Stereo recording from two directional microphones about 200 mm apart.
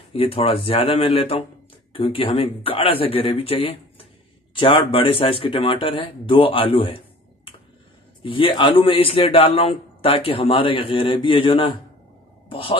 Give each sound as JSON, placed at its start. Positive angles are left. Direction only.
{"t": 0.1, "sound": "a man's voice", "side_deg": 30}
{"t": 8.2, "sound": "a man's voice", "side_deg": 25}